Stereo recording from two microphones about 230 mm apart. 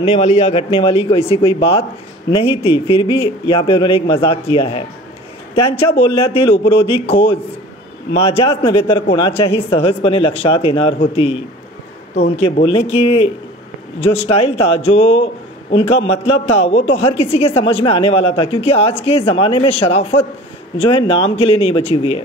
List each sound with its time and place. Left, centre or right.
0.0 s a woman's voice: left
12.2 s a woman's voice: left